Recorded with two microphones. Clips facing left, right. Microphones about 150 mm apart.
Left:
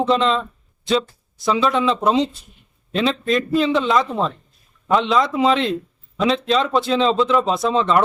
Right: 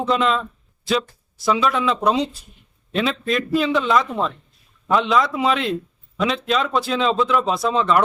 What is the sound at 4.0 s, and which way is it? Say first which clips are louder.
Speech: left 2 dB; 30° left (ahead or behind).